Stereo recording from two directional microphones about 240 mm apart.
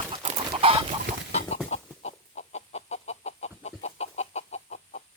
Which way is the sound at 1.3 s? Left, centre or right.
Left.